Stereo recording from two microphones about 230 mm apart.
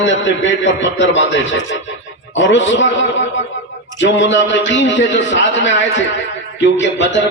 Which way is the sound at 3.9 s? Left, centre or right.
Left.